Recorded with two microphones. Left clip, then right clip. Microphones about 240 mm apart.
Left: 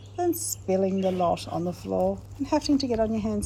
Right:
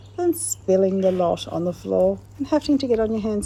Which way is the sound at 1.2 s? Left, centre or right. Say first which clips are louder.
Right 4 dB; right.